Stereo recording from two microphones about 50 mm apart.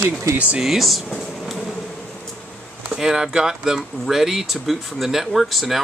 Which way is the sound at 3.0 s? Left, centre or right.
Centre.